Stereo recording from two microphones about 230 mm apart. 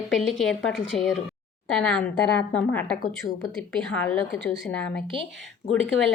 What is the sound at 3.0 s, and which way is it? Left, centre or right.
Speech, left.